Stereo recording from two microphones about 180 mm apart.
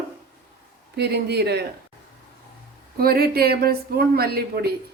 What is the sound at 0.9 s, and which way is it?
Speech, 65° right (ahead or behind).